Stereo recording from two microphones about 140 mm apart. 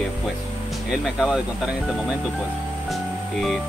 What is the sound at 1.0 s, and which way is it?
Speech, 5° right (ahead or behind).